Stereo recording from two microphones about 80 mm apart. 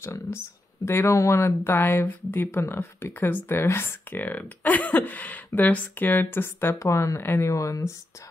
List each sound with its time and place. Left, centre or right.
0.0 s speech: left
6.8 s speech: left